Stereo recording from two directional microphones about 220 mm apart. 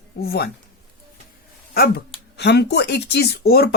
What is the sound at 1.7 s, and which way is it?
Speech, 45° left (ahead or behind).